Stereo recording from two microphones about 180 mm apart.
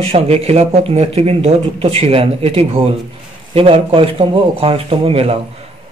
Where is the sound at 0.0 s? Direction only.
35° right (ahead or behind).